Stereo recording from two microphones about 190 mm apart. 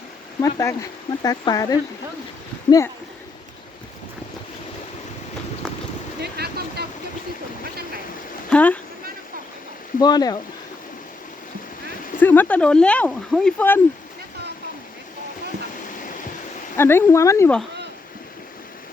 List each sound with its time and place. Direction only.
0.4 s speech: 15° left (ahead or behind)
6.3 s vehicle: 55° right (ahead or behind)
8.4 s speech: 5° left (ahead or behind)
10.0 s speech: 20° left (ahead or behind)
12.2 s speech: 10° left (ahead or behind)
16.7 s speech: 10° left (ahead or behind)